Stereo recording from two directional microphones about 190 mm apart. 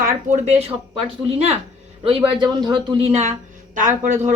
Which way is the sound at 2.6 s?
25° right (ahead or behind).